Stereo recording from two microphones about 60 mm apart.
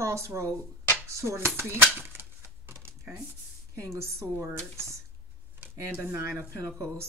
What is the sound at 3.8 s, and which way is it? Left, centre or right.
Speech, right.